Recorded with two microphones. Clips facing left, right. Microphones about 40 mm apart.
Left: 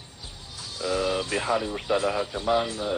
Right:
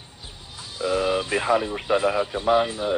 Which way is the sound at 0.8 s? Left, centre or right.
Centre.